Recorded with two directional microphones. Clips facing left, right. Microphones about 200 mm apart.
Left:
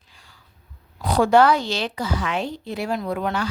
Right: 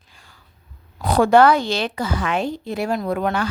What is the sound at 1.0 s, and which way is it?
A woman's voice, 55° right (ahead or behind).